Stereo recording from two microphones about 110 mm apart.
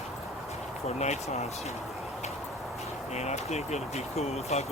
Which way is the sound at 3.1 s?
90° left.